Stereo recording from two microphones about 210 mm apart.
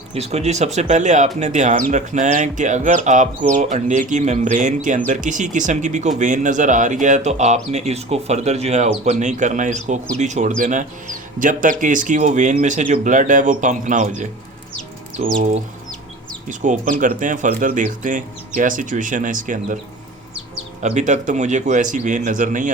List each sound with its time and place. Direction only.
0.1 s speech: 30° right (ahead or behind)
15.4 s speech: 35° right (ahead or behind)
20.8 s speech: 35° right (ahead or behind)